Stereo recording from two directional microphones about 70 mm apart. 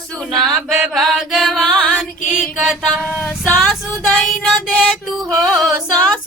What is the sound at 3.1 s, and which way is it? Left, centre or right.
Speech, left.